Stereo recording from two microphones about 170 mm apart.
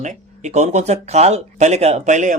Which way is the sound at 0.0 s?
45° right (ahead or behind).